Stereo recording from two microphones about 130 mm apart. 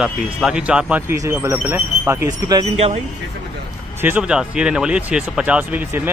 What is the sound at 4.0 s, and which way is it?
Speech, 15° right (ahead or behind).